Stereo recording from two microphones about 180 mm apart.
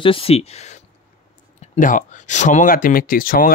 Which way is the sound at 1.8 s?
45° left (ahead or behind).